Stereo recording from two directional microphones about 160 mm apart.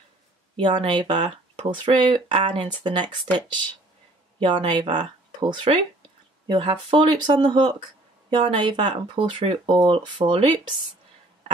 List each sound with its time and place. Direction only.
0.6 s speech: 30° right (ahead or behind)